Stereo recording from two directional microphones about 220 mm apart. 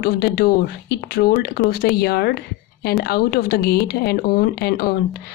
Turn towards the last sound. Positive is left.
turn(degrees=45)  # may be behind; listen again after turning